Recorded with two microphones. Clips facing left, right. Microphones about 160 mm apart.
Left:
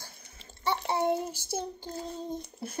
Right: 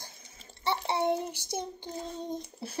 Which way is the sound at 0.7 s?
15° right (ahead or behind).